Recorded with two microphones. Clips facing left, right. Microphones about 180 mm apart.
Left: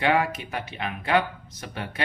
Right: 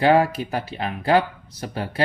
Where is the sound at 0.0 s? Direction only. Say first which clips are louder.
Right 6 dB; 35° right (ahead or behind).